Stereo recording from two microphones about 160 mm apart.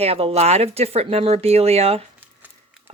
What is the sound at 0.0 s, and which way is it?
Speech, 40° right (ahead or behind).